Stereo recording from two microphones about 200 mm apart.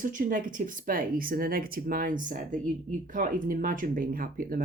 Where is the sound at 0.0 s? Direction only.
40° right (ahead or behind).